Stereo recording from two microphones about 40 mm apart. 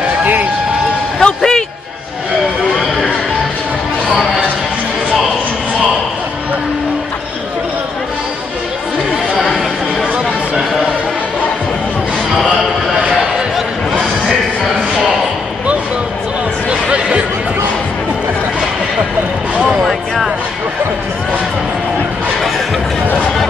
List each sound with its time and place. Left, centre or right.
0.2 s run: right
1.2 s music: centre
19.8 s a sound: centre